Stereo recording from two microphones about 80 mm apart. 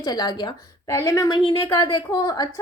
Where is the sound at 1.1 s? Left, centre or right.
Left.